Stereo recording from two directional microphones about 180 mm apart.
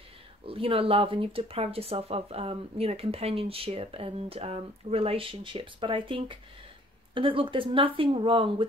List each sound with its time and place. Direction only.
0.5 s speech: 30° right (ahead or behind)